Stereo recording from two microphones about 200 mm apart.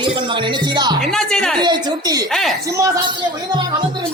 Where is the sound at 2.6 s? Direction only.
15° right (ahead or behind).